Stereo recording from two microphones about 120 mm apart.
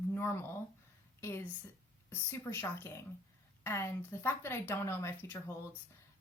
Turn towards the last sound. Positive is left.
turn(degrees=20)  # may be behind; listen again after turning